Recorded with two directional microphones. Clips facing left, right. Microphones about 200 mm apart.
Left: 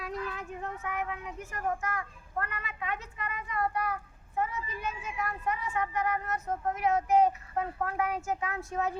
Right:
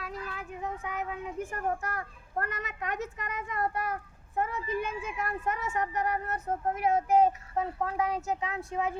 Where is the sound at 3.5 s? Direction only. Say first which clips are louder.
Left 1 dB; 45° right (ahead or behind).